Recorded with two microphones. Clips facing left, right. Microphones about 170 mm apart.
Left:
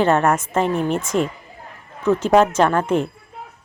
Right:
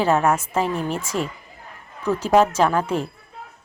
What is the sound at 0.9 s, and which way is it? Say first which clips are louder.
Speech: left 5 dB; 50° left (ahead or behind).